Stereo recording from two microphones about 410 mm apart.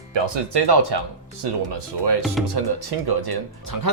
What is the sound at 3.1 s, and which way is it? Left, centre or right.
Speech, right.